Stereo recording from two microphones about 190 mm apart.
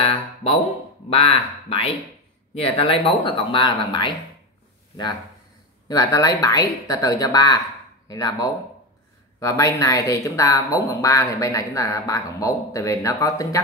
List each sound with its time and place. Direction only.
0.0 s speech: 30° left (ahead or behind)
5.9 s speech: 20° left (ahead or behind)